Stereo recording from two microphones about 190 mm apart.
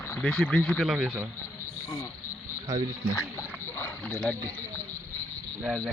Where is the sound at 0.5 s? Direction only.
5° left (ahead or behind).